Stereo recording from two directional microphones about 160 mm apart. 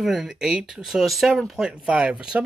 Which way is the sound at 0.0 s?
Centre (ahead or behind).